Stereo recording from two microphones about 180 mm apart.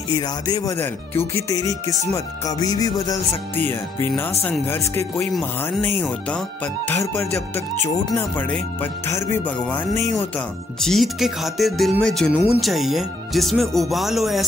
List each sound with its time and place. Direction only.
0.1 s speech: 20° left (ahead or behind)
10.8 s speech: centre (ahead or behind)